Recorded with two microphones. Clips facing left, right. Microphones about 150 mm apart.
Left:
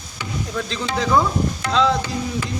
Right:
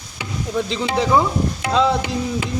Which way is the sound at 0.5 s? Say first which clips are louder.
Right 5 dB; 20° right (ahead or behind).